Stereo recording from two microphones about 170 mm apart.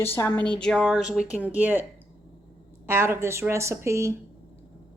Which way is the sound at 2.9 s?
15° right (ahead or behind).